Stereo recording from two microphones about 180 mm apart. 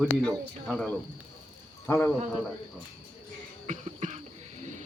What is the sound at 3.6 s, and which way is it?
Cough, 40° right (ahead or behind).